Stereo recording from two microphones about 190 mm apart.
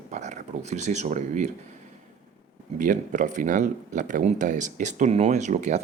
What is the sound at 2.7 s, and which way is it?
Speech, 45° right (ahead or behind).